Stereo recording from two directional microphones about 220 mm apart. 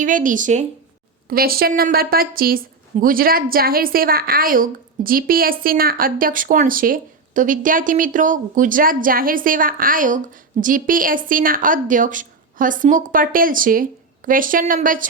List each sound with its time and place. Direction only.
0.0 s a woman's voice: 35° right (ahead or behind)